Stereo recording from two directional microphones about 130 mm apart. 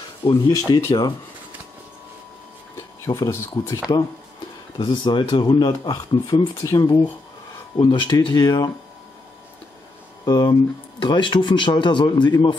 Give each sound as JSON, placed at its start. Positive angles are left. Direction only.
{"t": 0.2, "sound": "speech", "side_deg": 30}
{"t": 3.2, "sound": "speech", "side_deg": 20}
{"t": 4.7, "sound": "speech", "side_deg": 35}
{"t": 10.2, "sound": "speech", "side_deg": 30}